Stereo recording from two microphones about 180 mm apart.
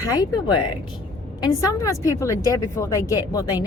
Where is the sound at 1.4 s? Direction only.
20° left (ahead or behind).